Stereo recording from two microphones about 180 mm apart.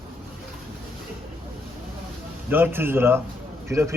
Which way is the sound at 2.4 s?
10° right (ahead or behind).